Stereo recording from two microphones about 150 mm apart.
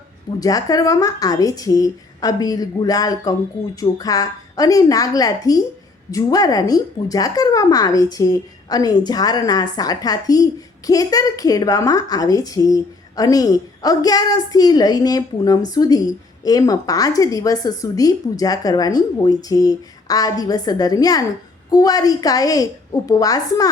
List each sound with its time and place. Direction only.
0.3 s speech: 25° left (ahead or behind)